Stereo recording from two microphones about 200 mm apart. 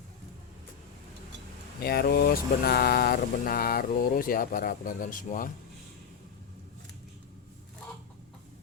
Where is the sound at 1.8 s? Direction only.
50° left (ahead or behind).